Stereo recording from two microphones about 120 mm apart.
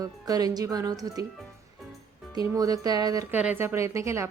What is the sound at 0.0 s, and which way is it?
Speech, 30° right (ahead or behind).